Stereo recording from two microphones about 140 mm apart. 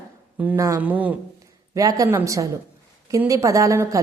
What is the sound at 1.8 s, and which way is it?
A woman's voice, 25° right (ahead or behind).